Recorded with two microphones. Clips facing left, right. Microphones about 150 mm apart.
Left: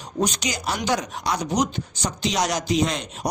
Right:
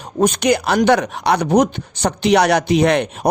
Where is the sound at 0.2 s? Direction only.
55° right (ahead or behind).